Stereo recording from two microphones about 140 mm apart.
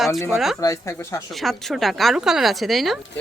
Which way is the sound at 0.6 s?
20° left (ahead or behind).